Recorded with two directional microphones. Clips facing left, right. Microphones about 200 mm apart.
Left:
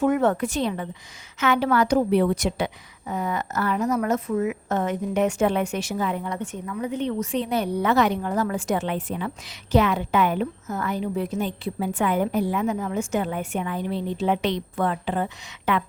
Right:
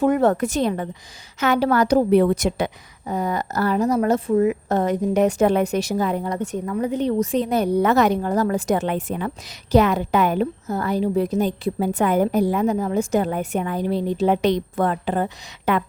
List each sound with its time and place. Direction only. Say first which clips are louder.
0.0 s a woman's voice: right 3 dB; 35° right (ahead or behind)